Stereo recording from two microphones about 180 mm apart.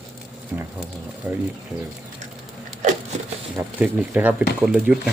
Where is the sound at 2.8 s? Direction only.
45° right (ahead or behind).